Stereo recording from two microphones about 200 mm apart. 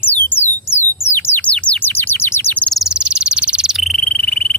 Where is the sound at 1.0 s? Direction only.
10° left (ahead or behind).